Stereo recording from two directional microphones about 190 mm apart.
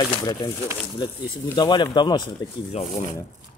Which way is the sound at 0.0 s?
20° left (ahead or behind).